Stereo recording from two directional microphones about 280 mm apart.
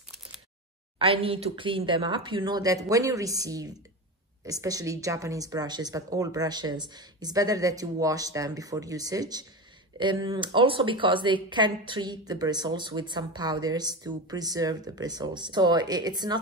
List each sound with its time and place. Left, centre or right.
0.9 s speech: centre